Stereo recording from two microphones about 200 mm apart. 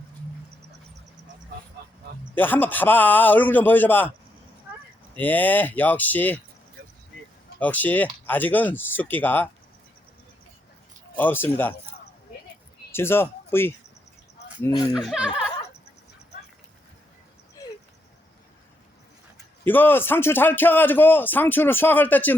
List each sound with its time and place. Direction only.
2.3 s speech: 10° left (ahead or behind)
5.1 s speech: 10° left (ahead or behind)
7.6 s speech: 10° left (ahead or behind)
11.2 s speech: 10° left (ahead or behind)
12.9 s speech: 10° left (ahead or behind)
14.9 s speech: 5° right (ahead or behind)
19.6 s speech: 10° left (ahead or behind)